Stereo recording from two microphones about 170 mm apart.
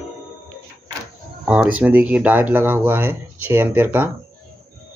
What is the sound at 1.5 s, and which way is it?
Speech, 10° right (ahead or behind).